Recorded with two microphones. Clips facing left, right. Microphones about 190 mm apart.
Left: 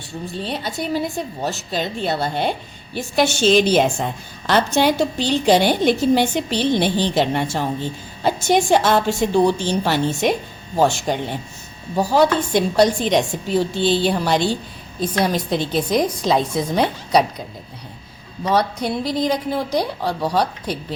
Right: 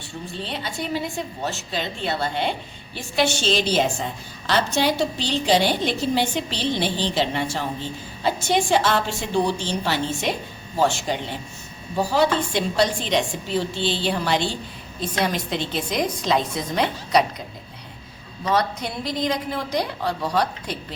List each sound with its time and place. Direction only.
0.4 s a woman's voice: 40° left (ahead or behind)
18.4 s a woman's voice: 35° left (ahead or behind)